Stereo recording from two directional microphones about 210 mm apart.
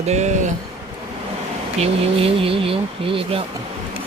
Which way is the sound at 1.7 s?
30° right (ahead or behind).